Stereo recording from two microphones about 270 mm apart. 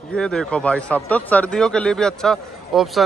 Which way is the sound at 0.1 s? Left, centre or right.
Centre.